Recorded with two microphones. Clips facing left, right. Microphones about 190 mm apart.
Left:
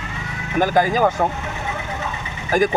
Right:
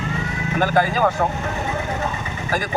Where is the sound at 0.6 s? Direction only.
15° left (ahead or behind).